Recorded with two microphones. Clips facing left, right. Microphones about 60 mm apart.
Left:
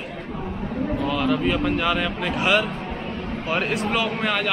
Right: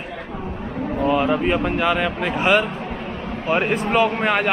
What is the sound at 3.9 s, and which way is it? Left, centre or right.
Speech, right.